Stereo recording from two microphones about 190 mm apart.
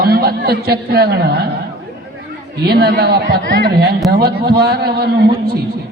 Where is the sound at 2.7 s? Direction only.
55° right (ahead or behind).